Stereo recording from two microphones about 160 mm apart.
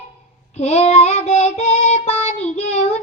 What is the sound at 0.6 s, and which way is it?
Child singing, 40° left (ahead or behind).